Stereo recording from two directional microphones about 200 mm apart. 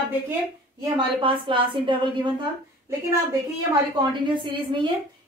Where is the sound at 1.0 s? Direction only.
25° right (ahead or behind).